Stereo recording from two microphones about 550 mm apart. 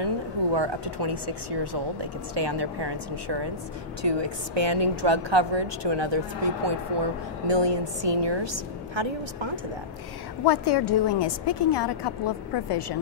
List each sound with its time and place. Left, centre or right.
0.0 s a woman's voice: right
10.4 s a woman's voice: left